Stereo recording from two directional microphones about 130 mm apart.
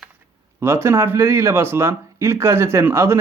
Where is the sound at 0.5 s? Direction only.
20° right (ahead or behind).